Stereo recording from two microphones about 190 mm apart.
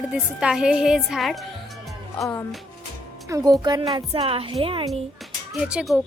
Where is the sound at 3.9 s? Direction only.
30° right (ahead or behind).